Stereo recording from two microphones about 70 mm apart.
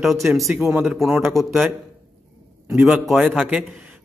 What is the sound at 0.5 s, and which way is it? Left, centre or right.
Speech, right.